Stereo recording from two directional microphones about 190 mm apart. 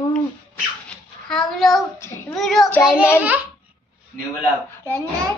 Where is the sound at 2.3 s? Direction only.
Centre (ahead or behind).